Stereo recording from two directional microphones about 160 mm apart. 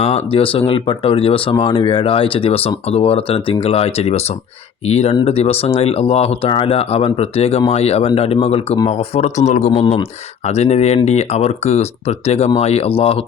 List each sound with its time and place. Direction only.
0.0 s speech: 40° left (ahead or behind)